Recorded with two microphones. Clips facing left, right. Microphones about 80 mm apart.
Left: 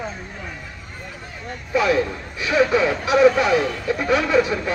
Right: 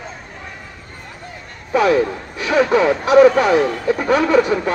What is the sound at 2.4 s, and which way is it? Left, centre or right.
Speech, right.